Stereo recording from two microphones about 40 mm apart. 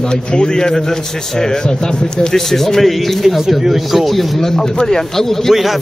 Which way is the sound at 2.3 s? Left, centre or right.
Centre.